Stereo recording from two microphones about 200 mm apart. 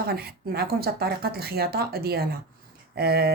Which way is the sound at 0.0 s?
50° right (ahead or behind).